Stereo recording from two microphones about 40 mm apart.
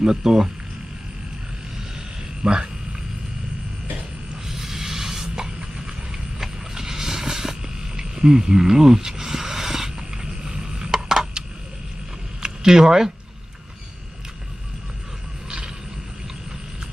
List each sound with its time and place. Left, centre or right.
0.0 s speech: centre
2.4 s speech: right
4.4 s a sound: centre
6.1 s vehicle: centre
7.9 s frog: centre
12.4 s a sound: centre
15.4 s mechanisms: right